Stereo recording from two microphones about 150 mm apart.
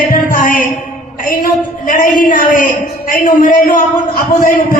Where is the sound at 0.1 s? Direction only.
65° left (ahead or behind).